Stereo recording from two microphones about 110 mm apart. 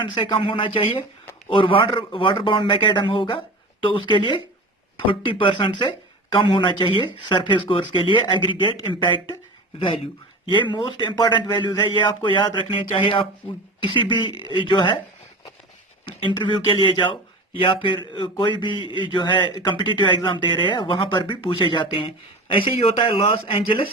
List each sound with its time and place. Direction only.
0.0 s speech: 50° left (ahead or behind)
16.0 s speech: 45° left (ahead or behind)